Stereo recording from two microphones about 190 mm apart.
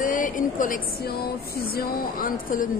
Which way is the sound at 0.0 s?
45° left (ahead or behind).